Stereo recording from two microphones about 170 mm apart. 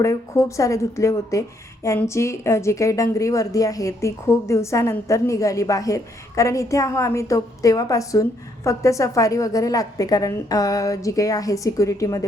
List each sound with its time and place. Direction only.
0.0 s a woman's voice: 15° left (ahead or behind)